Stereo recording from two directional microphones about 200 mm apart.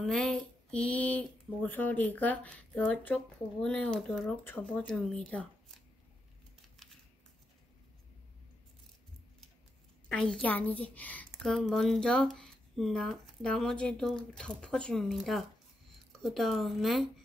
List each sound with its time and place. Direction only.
0.0 s a woman's voice: 5° left (ahead or behind)
10.0 s a woman's voice: 5° left (ahead or behind)